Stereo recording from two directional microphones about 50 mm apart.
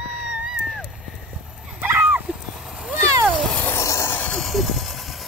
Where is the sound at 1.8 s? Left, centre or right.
Right.